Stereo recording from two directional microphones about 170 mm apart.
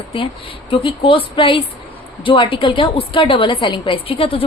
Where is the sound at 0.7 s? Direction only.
30° left (ahead or behind).